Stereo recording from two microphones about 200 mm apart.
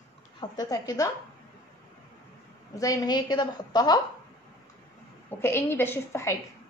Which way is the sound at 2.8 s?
15° left (ahead or behind).